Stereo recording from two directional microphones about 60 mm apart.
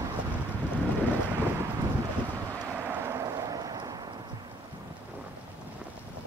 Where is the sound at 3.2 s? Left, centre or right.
Right.